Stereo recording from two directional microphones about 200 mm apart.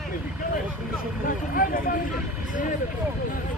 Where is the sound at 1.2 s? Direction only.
45° left (ahead or behind).